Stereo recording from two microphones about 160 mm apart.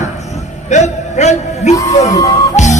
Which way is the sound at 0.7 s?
45° left (ahead or behind).